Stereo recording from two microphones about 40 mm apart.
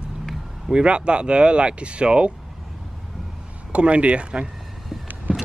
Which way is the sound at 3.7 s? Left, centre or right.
Right.